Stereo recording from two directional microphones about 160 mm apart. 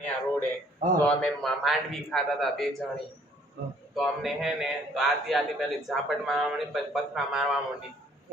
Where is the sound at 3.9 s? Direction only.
Centre (ahead or behind).